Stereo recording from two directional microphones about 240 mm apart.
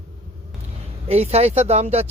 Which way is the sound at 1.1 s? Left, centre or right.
Right.